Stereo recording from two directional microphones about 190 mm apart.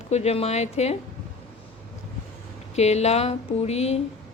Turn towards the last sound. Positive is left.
turn(degrees=35)  # may be behind; listen again after turning